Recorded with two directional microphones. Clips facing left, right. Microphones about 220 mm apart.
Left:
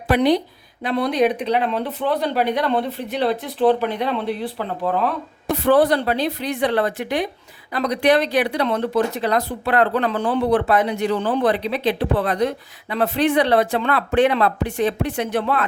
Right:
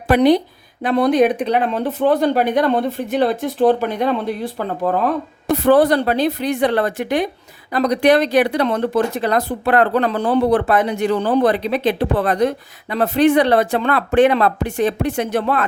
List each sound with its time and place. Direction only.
0.1 s a woman's voice: 45° right (ahead or behind)